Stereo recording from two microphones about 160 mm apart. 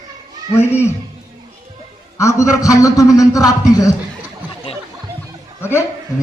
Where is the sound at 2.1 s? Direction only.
20° left (ahead or behind).